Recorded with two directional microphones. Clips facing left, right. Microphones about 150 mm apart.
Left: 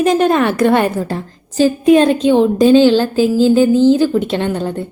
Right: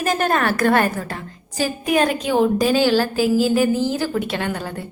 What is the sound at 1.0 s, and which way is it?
A woman's voice, 30° left (ahead or behind).